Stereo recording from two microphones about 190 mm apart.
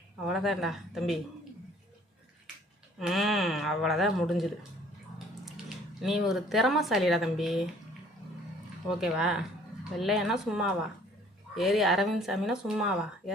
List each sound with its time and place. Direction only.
0.3 s speech: centre (ahead or behind)
3.0 s speech: centre (ahead or behind)
6.0 s speech: centre (ahead or behind)
9.0 s speech: 5° right (ahead or behind)